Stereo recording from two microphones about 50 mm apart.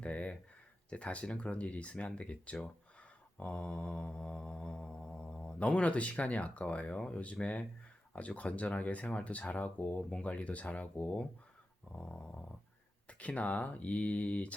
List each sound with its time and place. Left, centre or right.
0.0 s a sound: left
0.9 s speech: left
3.3 s mantra: left
7.1 s speech: left
10.0 s speech: centre
10.2 s speech: left
11.9 s dog: centre
13.1 s speech: left